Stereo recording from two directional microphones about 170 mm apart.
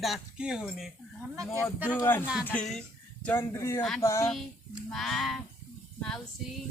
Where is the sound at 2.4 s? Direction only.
10° left (ahead or behind).